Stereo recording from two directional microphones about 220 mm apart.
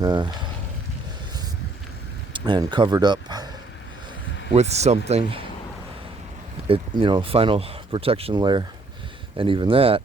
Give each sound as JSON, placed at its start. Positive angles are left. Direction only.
{"t": 0.0, "sound": "speech", "side_deg": -20}
{"t": 2.3, "sound": "speech", "side_deg": -20}
{"t": 4.5, "sound": "speech", "side_deg": -30}
{"t": 6.7, "sound": "speech", "side_deg": -20}